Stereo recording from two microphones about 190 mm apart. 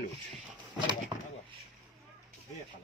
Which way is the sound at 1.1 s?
25° right (ahead or behind).